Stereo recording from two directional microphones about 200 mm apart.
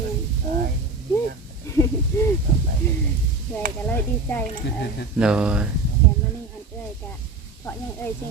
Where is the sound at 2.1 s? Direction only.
15° left (ahead or behind).